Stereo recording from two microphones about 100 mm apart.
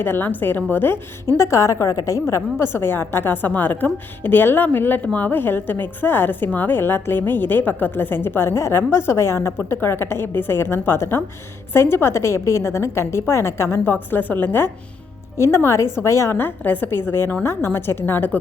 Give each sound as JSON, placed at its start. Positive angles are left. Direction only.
{"t": 0.0, "sound": "a woman's voice", "side_deg": 20}
{"t": 1.4, "sound": "a woman's voice", "side_deg": 30}